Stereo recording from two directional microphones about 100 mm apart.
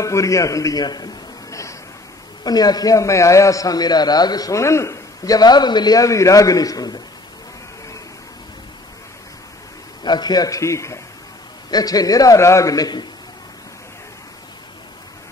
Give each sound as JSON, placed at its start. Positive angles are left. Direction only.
{"t": 0.0, "sound": "a man's voice", "side_deg": 30}
{"t": 10.0, "sound": "a man's voice", "side_deg": 45}